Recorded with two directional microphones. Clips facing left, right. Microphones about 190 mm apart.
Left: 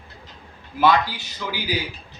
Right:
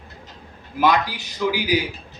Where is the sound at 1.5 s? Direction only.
15° right (ahead or behind).